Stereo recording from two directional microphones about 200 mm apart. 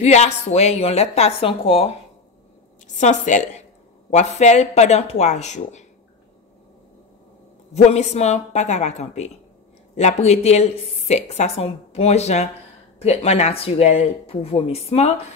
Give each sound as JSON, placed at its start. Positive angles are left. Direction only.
{"t": 0.0, "sound": "a woman's voice", "side_deg": 35}
{"t": 3.0, "sound": "a woman's voice", "side_deg": 35}
{"t": 7.7, "sound": "a woman's voice", "side_deg": 35}